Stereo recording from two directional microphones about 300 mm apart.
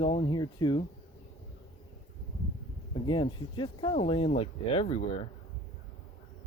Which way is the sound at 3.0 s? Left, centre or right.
Centre.